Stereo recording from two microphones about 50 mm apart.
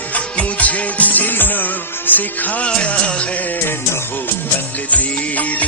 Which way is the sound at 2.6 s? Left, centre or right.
Left.